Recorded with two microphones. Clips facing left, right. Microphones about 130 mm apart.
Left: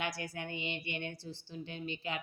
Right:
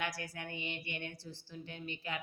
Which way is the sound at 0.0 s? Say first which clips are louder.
Left 2 dB; 20° left (ahead or behind).